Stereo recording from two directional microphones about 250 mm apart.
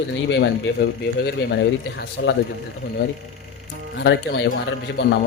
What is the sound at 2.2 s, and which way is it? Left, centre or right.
Speech, left.